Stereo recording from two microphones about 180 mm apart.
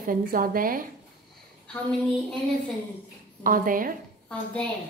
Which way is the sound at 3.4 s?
50° right (ahead or behind).